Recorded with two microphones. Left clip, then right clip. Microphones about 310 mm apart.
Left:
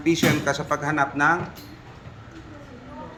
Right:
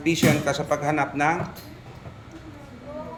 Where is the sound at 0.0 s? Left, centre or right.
Centre.